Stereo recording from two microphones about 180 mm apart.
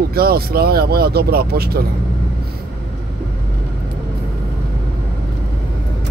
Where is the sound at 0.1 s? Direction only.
55° right (ahead or behind).